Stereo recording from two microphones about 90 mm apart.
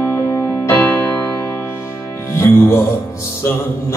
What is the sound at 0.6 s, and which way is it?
Music, 25° left (ahead or behind).